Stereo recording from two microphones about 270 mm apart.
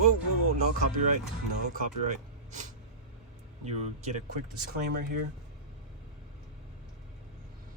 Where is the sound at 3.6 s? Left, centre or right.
Right.